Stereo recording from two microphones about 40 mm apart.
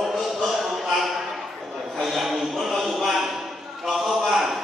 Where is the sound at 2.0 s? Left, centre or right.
Centre.